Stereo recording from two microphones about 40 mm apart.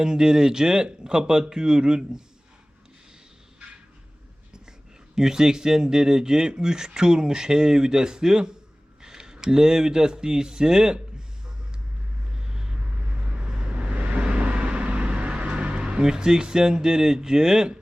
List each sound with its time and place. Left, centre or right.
0.0 s speech: centre
5.1 s speech: centre
12.4 s vehicle: centre
13.2 s vehicle: right